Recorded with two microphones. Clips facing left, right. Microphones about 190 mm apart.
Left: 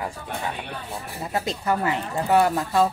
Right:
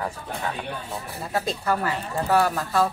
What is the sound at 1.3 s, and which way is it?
A woman's voice, 20° left (ahead or behind).